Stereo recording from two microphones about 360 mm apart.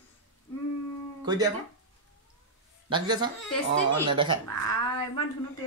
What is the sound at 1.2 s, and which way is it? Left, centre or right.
Speech, centre.